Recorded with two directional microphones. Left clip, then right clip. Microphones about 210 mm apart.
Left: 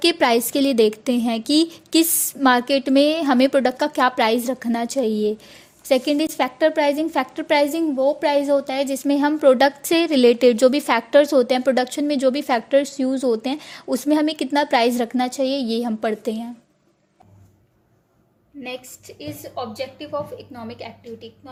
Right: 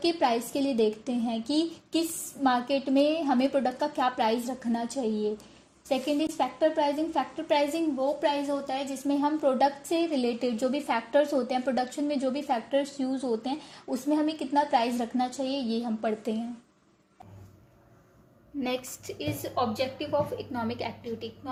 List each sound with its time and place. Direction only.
0.0 s a woman's voice: 45° left (ahead or behind)
18.6 s a woman's voice: 5° left (ahead or behind)